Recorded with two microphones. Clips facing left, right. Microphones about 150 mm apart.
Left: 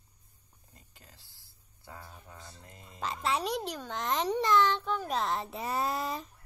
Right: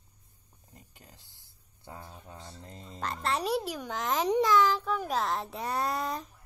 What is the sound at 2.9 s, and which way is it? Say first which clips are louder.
A child's voice: even; centre (ahead or behind).